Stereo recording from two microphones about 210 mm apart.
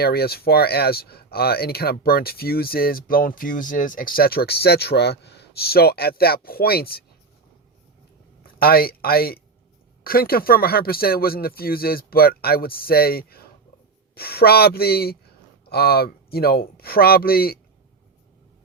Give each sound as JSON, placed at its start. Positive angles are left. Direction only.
{"t": 0.0, "sound": "speech", "side_deg": 50}
{"t": 8.5, "sound": "speech", "side_deg": 45}